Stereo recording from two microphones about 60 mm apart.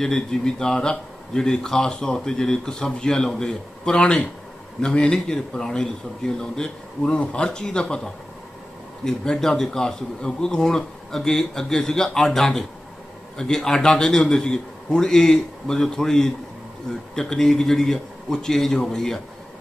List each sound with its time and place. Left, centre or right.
0.0 s a man's voice: centre
9.0 s a man's voice: centre